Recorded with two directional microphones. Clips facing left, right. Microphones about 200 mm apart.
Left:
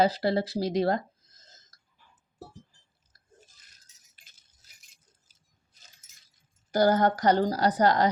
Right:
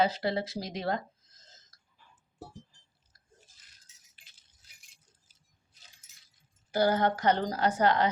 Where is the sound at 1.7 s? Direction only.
45° left (ahead or behind).